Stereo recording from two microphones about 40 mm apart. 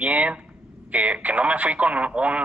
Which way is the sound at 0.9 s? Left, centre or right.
Right.